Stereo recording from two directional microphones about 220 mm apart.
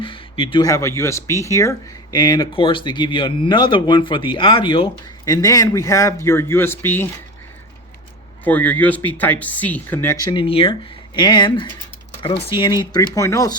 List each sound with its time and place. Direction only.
0.0 s speech: 25° left (ahead or behind)
8.4 s speech: 5° left (ahead or behind)
10.3 s speech: 25° left (ahead or behind)